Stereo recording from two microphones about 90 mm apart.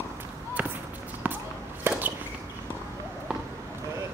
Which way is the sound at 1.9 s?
25° right (ahead or behind).